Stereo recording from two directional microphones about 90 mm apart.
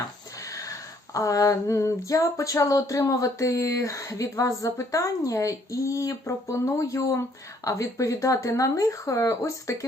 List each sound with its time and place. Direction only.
0.4 s speech: 40° left (ahead or behind)